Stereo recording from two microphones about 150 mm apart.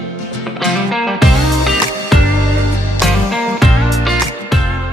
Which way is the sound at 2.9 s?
Centre (ahead or behind).